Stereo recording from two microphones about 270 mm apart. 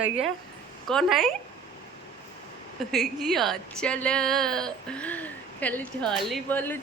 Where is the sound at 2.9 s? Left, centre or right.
Centre.